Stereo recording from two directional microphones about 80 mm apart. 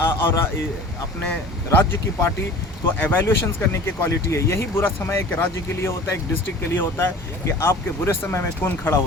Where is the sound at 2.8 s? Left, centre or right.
Left.